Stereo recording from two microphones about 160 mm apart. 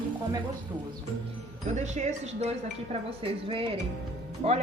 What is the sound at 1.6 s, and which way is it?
A woman's voice, 45° right (ahead or behind).